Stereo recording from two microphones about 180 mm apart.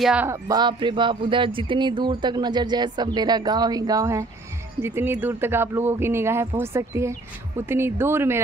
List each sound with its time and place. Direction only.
0.0 s speech: 5° right (ahead or behind)
0.5 s a man's voice: 25° right (ahead or behind)